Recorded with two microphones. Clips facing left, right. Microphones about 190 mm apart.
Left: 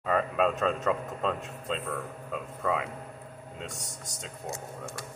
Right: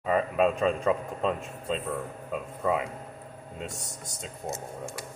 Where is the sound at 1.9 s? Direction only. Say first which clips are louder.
Right 2 dB; 15° right (ahead or behind).